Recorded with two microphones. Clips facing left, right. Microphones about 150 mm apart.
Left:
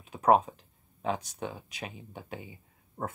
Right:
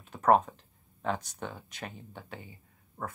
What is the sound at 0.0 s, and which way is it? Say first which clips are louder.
Speech: left 1 dB; 10° left (ahead or behind).